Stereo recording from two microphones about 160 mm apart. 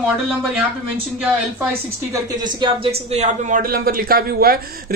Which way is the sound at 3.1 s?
45° right (ahead or behind).